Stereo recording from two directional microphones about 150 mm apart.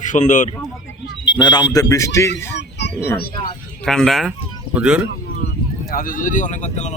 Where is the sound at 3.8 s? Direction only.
5° left (ahead or behind).